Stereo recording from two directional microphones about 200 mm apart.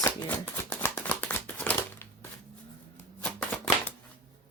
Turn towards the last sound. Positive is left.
turn(degrees=10)  # may be behind; listen again after turning